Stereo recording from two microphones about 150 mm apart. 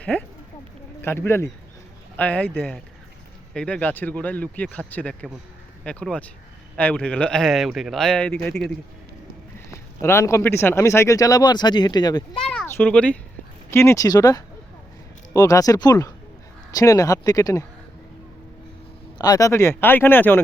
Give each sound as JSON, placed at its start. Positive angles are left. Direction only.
{"t": 0.0, "sound": "a man's voice", "side_deg": 10}
{"t": 9.6, "sound": "a man's voice", "side_deg": 20}
{"t": 12.6, "sound": "a man's voice", "side_deg": 15}
{"t": 19.2, "sound": "speech", "side_deg": 25}